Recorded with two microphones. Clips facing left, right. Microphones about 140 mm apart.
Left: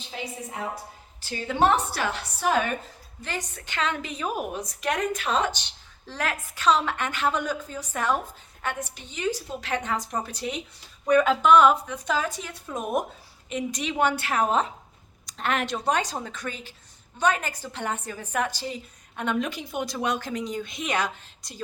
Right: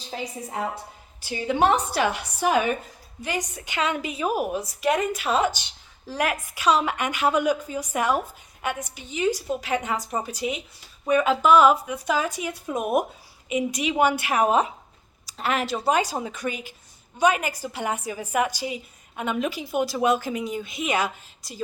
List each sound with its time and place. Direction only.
0.1 s a woman's voice: 40° right (ahead or behind)
1.2 s a woman's voice: 15° right (ahead or behind)